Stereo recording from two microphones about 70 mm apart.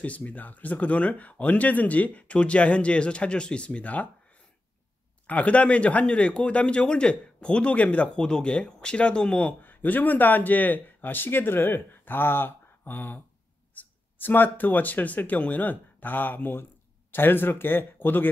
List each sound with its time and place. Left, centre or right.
0.0 s speech: left
5.2 s speech: centre